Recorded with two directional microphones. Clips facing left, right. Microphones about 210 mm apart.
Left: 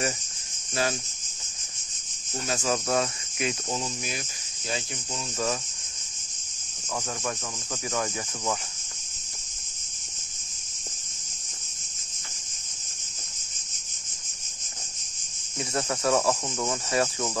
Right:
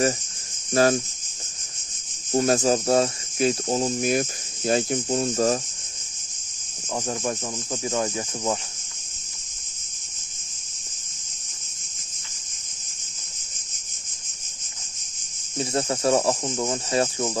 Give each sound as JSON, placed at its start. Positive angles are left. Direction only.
{"t": 0.8, "sound": "speech", "side_deg": -45}
{"t": 2.3, "sound": "speech", "side_deg": -45}
{"t": 7.8, "sound": "cricket", "side_deg": -25}
{"t": 15.5, "sound": "cricket", "side_deg": -30}